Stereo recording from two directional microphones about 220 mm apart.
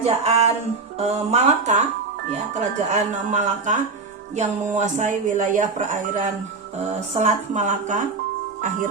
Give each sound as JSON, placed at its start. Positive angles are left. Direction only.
{"t": 0.0, "sound": "music", "side_deg": -30}
{"t": 0.9, "sound": "speech", "side_deg": -30}
{"t": 2.9, "sound": "speech", "side_deg": -35}